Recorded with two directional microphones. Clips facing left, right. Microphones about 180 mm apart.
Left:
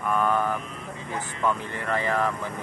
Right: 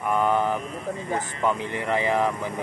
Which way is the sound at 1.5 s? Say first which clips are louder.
Right 2 dB; 15° right (ahead or behind).